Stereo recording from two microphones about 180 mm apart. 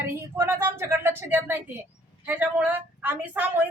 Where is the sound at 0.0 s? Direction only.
15° right (ahead or behind).